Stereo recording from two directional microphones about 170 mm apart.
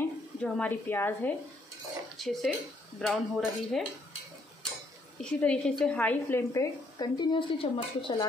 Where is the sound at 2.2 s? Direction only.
Centre (ahead or behind).